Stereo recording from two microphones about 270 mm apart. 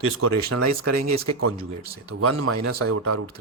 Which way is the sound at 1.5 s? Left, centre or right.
Right.